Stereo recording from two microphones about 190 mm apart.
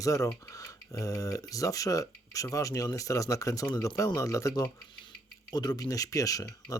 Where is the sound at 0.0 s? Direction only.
15° left (ahead or behind).